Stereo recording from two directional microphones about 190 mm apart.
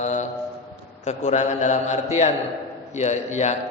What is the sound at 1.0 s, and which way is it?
A man's voice, 40° left (ahead or behind).